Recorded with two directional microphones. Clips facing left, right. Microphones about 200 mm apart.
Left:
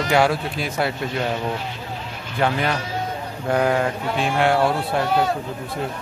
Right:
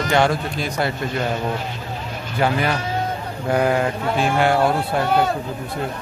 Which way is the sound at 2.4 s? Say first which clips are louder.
Right 1 dB; 5° right (ahead or behind).